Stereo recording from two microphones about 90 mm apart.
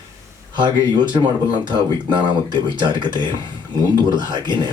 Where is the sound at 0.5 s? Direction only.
60° right (ahead or behind).